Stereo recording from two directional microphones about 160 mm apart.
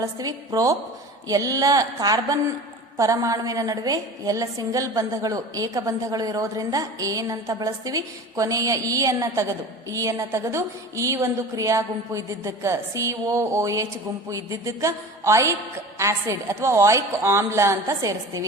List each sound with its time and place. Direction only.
0.0 s a woman's voice: 20° right (ahead or behind)